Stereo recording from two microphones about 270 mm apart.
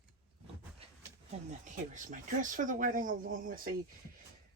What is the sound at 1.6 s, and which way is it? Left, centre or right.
Speech, right.